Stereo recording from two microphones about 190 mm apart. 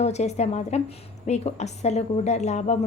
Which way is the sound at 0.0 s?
35° left (ahead or behind).